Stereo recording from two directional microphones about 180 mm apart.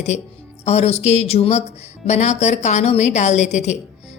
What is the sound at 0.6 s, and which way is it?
Speech, 35° left (ahead or behind).